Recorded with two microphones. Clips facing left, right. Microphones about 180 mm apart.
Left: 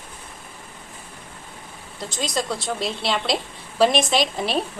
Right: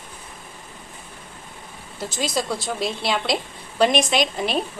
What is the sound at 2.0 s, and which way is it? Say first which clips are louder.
A woman's voice: right 1 dB; 5° right (ahead or behind).